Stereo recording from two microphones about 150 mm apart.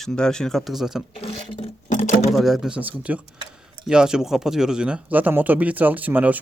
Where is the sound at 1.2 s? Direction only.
40° left (ahead or behind).